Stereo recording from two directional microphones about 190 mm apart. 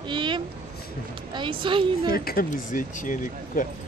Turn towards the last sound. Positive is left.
turn(degrees=45)  # may be behind; listen again after turning